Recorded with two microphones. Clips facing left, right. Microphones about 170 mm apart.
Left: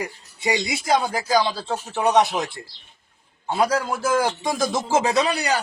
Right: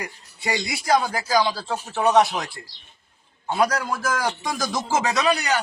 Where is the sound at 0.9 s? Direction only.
25° left (ahead or behind).